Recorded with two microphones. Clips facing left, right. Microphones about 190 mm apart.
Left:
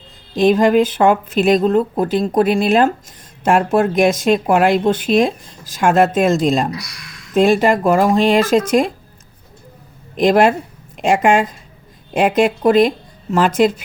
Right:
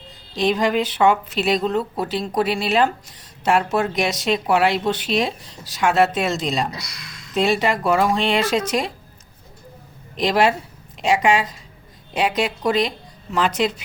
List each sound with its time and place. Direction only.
0.3 s speech: 50° left (ahead or behind)
10.2 s speech: 50° left (ahead or behind)